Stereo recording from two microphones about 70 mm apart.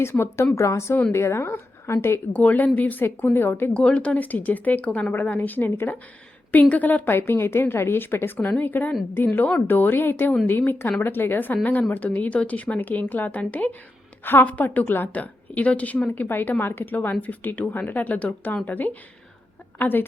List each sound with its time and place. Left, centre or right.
0.0 s a woman's voice: left
2.3 s a woman's voice: left
3.8 s a woman's voice: centre